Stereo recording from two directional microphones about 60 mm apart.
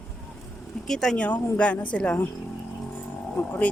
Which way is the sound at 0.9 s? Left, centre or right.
Centre.